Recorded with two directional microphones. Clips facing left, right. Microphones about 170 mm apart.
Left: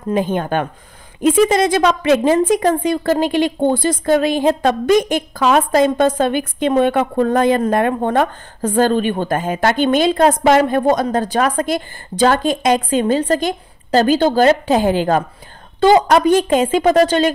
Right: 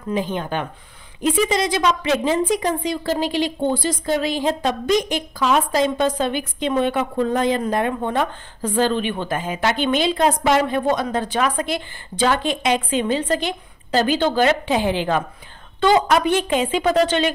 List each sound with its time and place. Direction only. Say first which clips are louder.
0.1 s a woman's voice: left 6 dB; 50° left (ahead or behind)